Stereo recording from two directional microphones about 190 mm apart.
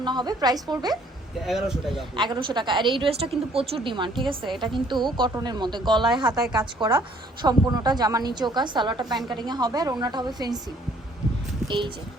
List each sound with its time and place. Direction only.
0.0 s a woman's voice: 20° right (ahead or behind)
1.5 s speech: centre (ahead or behind)
2.1 s a woman's voice: 25° right (ahead or behind)